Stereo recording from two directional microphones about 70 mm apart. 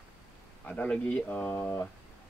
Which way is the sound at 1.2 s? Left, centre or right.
Left.